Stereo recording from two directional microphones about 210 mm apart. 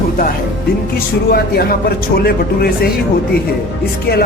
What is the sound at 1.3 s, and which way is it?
Speech, 45° left (ahead or behind).